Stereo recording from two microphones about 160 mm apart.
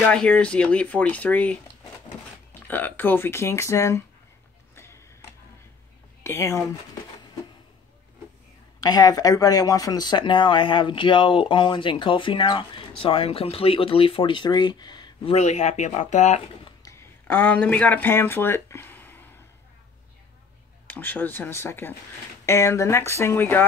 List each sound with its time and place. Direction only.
0.0 s speech: 5° left (ahead or behind)
2.7 s speech: 10° left (ahead or behind)
6.2 s speech: 15° left (ahead or behind)
8.8 s speech: 25° left (ahead or behind)
15.3 s speech: 45° left (ahead or behind)
16.6 s a sound: 20° left (ahead or behind)
20.8 s speech: 10° left (ahead or behind)